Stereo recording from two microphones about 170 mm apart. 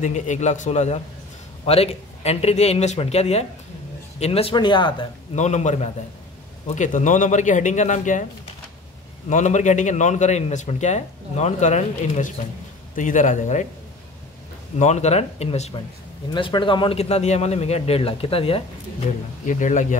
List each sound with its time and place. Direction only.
0.0 s a man's voice: 45° left (ahead or behind); by 5.0 s 25° left (ahead or behind)
5.3 s a man's voice: 45° left (ahead or behind)
9.3 s a man's voice: 45° left (ahead or behind)
14.8 s a man's voice: 40° left (ahead or behind)
19.4 s a man's voice: 45° left (ahead or behind)